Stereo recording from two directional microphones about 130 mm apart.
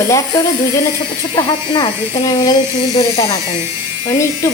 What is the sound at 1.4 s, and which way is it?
Speech, 35° left (ahead or behind).